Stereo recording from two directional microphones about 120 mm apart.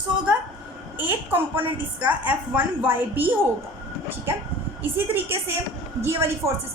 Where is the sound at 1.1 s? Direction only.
15° right (ahead or behind).